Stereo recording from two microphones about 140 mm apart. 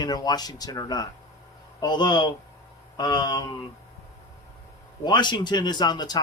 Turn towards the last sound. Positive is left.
turn(degrees=30)  # may be behind; listen again after turning